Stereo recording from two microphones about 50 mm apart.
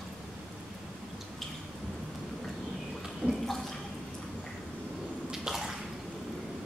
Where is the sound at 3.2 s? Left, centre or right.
Left.